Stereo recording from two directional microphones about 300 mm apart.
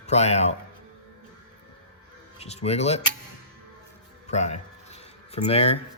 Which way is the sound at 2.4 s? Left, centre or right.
Left.